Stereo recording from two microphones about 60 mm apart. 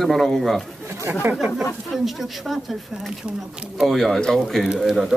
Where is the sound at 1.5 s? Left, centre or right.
Centre.